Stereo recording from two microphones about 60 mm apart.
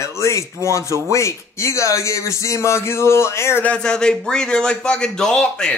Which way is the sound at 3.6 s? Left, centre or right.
Centre.